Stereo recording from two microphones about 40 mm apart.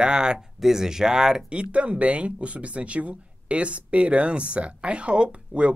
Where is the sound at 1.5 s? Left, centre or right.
Right.